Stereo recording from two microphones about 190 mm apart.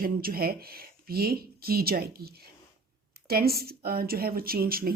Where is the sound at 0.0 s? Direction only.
50° right (ahead or behind).